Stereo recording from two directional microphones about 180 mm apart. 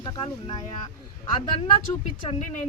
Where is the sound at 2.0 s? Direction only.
45° left (ahead or behind).